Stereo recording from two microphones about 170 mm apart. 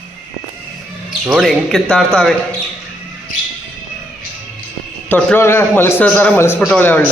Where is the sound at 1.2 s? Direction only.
Centre (ahead or behind).